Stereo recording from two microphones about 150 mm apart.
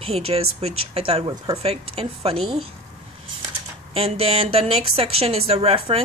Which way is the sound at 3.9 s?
40° right (ahead or behind).